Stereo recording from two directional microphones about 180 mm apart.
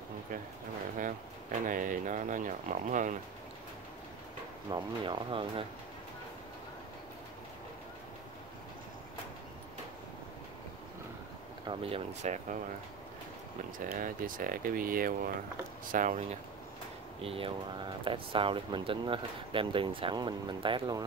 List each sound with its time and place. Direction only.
1.7 s a sound: 50° right (ahead or behind)
4.6 s speech: 25° right (ahead or behind)
11.6 s speech: 30° right (ahead or behind)
13.7 s speech: 50° right (ahead or behind)
17.2 s speech: 30° right (ahead or behind)